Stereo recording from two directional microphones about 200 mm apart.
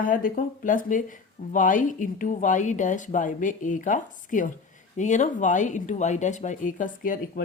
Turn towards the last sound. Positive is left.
turn(degrees=45)  # may be behind; listen again after turning